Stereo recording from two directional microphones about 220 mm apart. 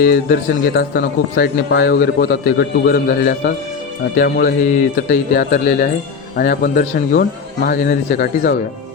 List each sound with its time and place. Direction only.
0.0 s a man's voice: 40° left (ahead or behind)